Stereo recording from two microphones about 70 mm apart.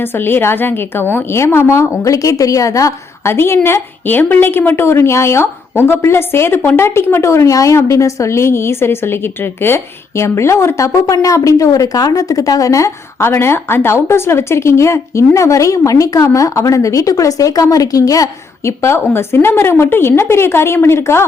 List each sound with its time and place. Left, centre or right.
0.0 s a woman's voice: left
3.3 s a woman's voice: left
13.1 s a woman's voice: left